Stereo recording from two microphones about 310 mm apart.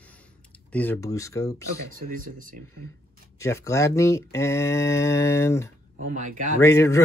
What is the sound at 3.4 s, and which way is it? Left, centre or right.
Speech, centre.